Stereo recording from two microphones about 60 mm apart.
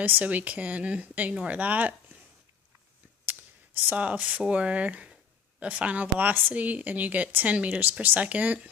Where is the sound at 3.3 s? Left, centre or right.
Right.